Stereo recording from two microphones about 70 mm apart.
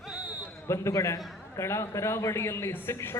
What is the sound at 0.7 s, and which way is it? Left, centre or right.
A man's voice, left.